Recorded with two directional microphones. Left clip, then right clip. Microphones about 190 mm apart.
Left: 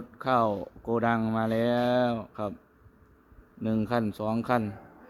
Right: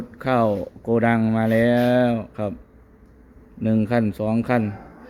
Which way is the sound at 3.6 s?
20° left (ahead or behind).